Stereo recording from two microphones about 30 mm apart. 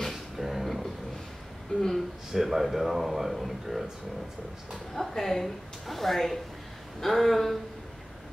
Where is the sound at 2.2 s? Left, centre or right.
Centre.